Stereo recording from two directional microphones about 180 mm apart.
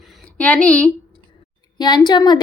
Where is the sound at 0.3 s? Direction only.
10° left (ahead or behind).